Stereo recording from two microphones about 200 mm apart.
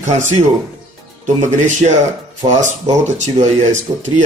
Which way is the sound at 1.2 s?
35° right (ahead or behind).